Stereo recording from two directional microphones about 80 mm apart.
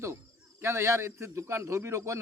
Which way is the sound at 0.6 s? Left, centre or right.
Right.